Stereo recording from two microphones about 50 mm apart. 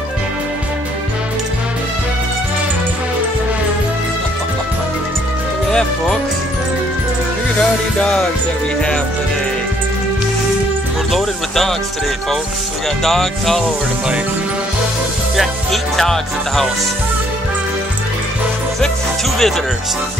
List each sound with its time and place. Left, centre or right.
5.7 s speech: centre
8.0 s music: left
11.1 s speech: centre
13.0 s music: centre
15.3 s music: centre
19.3 s music: centre